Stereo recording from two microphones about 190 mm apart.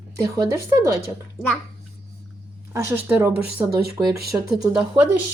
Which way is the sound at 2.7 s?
10° right (ahead or behind).